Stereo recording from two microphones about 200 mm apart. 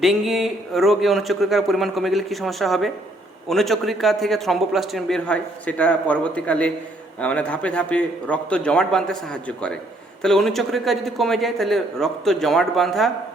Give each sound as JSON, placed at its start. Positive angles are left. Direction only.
{"t": 0.0, "sound": "a man's voice", "side_deg": 0}